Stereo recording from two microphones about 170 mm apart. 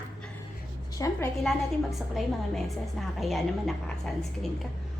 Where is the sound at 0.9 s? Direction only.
20° left (ahead or behind).